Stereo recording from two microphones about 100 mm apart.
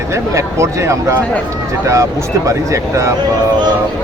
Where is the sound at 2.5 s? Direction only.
30° right (ahead or behind).